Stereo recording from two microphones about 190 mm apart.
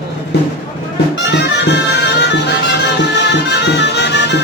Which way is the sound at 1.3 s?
65° left (ahead or behind).